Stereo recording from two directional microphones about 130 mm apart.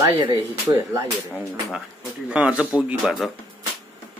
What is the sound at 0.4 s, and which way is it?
Speech, 25° right (ahead or behind).